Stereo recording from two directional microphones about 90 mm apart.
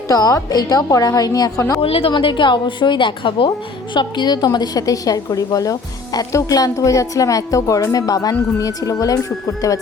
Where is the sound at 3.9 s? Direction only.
55° left (ahead or behind).